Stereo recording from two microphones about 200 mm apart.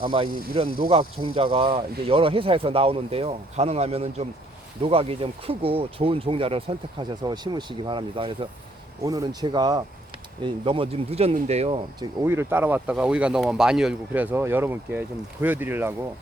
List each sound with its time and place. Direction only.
0.0 s speech: 25° right (ahead or behind)
11.9 s speech: 10° right (ahead or behind)